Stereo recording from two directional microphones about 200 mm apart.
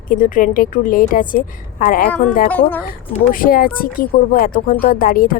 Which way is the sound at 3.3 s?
45° left (ahead or behind).